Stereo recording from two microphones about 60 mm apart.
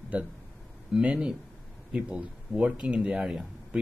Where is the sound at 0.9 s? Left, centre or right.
Centre.